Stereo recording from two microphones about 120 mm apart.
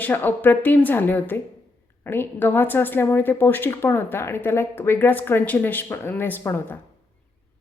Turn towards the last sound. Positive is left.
turn(degrees=20)  # may be behind; listen again after turning